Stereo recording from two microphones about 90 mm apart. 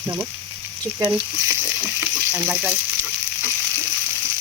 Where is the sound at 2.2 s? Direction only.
15° right (ahead or behind).